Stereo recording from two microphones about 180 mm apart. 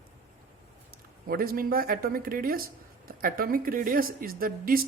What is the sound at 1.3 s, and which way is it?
A woman's voice, 55° right (ahead or behind).